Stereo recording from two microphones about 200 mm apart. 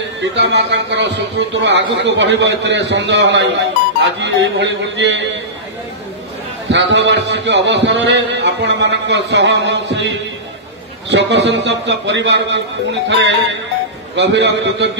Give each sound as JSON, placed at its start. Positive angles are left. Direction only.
{"t": 0.4, "sound": "a man's voice", "side_deg": -60}
{"t": 6.7, "sound": "a man's voice", "side_deg": -65}